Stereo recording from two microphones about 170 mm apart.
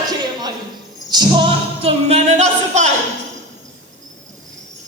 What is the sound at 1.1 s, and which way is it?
Music, 25° right (ahead or behind).